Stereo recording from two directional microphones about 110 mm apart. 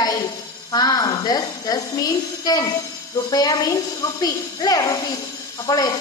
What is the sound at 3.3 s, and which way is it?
A woman's voice, 35° left (ahead or behind).